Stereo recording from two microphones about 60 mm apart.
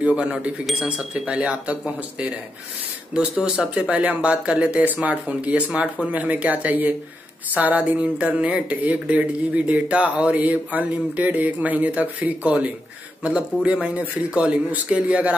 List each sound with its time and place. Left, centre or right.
0.0 s speech: centre